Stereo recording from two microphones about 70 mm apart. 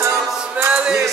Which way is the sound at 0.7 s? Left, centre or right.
Centre.